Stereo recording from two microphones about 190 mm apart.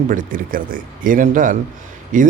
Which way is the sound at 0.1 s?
45° right (ahead or behind).